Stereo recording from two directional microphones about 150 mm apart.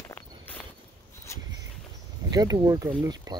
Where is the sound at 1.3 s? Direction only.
20° left (ahead or behind).